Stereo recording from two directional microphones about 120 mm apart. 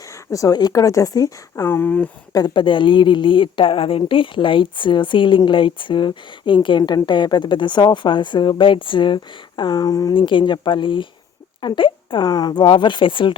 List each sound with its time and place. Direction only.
0.3 s speech: 30° left (ahead or behind)
2.3 s a woman's voice: 35° left (ahead or behind)
10.2 s a woman's voice: 45° left (ahead or behind)